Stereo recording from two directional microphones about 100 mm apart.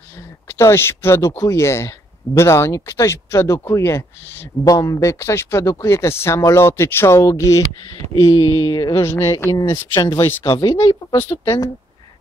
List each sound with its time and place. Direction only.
0.5 s speech: 30° left (ahead or behind)
9.0 s speech: 30° left (ahead or behind)
10.4 s speech: 45° left (ahead or behind)